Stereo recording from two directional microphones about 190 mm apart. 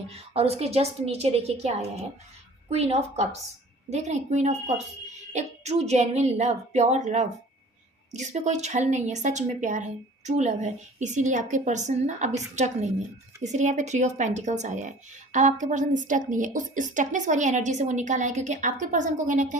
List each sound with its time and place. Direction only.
0.3 s speech: 30° right (ahead or behind)